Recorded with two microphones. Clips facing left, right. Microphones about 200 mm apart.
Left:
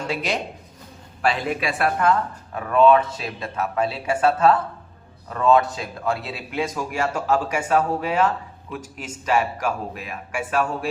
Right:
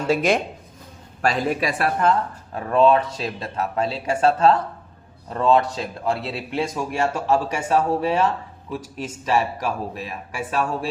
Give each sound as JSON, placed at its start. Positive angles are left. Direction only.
{"t": 0.1, "sound": "speech", "side_deg": -50}